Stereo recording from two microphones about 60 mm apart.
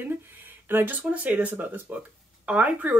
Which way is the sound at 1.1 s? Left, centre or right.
Right.